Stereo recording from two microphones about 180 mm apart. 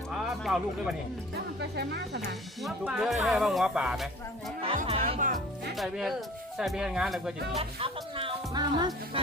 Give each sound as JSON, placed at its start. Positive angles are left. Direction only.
{"t": 0.1, "sound": "music", "side_deg": -5}
{"t": 1.7, "sound": "speech", "side_deg": -65}
{"t": 2.6, "sound": "speech", "side_deg": -5}
{"t": 4.9, "sound": "speech", "side_deg": -35}
{"t": 5.2, "sound": "speech", "side_deg": -50}
{"t": 5.7, "sound": "speech", "side_deg": 0}
{"t": 7.6, "sound": "music", "side_deg": -30}
{"t": 9.2, "sound": "speech", "side_deg": -30}